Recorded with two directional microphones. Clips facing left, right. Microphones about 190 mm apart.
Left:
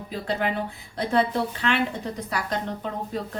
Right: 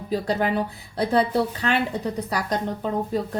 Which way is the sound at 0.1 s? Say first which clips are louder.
Right 4 dB; 40° right (ahead or behind).